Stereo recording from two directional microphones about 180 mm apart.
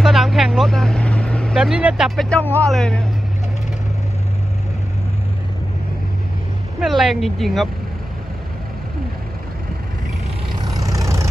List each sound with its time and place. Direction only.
0.0 s speech: centre (ahead or behind)
6.8 s a woman's voice: centre (ahead or behind)
10.6 s vehicle: 20° right (ahead or behind)